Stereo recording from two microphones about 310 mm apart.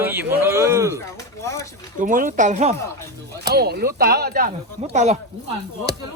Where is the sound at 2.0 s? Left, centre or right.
Right.